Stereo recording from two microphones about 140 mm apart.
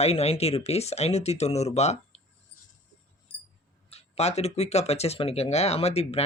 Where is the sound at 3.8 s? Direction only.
50° left (ahead or behind).